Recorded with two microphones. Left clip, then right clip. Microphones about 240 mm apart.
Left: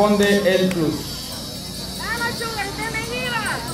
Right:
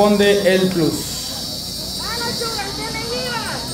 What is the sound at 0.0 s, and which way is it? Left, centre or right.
Speech, centre.